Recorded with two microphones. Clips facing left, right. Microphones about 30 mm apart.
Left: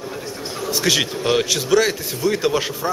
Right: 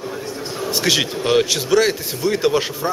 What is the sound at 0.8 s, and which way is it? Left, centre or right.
A man's voice, centre.